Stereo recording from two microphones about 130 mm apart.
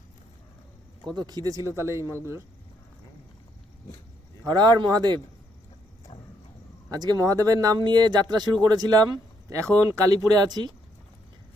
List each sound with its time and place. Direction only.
1.0 s speech: 30° right (ahead or behind)
4.4 s speech: 35° right (ahead or behind)
6.9 s speech: 30° right (ahead or behind)